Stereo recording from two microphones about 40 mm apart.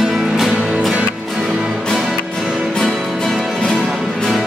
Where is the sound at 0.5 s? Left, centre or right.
Right.